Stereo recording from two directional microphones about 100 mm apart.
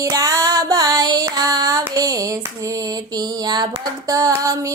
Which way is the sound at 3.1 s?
45° right (ahead or behind).